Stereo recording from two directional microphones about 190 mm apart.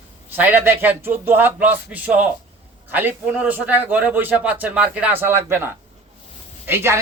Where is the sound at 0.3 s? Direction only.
10° right (ahead or behind).